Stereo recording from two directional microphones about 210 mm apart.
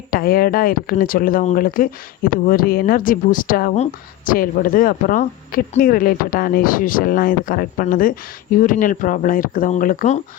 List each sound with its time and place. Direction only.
0.1 s speech: 45° left (ahead or behind)